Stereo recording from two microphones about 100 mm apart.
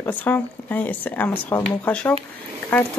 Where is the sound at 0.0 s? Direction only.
20° left (ahead or behind).